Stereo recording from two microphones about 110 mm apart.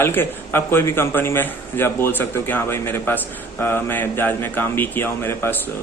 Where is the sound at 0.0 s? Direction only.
20° left (ahead or behind).